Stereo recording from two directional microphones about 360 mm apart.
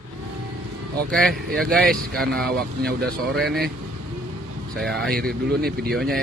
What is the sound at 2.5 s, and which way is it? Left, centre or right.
Speech, right.